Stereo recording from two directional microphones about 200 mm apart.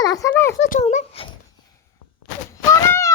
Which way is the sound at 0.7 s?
35° left (ahead or behind).